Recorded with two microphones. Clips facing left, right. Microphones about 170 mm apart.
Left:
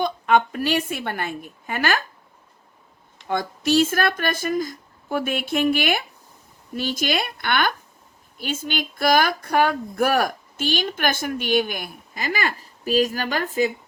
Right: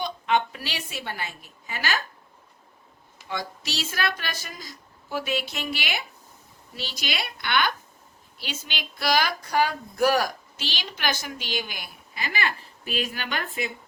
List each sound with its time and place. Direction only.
0.0 s speech: 50° left (ahead or behind)
3.2 s speech: 50° left (ahead or behind)